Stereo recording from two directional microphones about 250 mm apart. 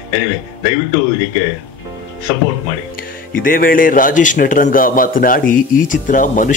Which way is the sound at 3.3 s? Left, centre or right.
Left.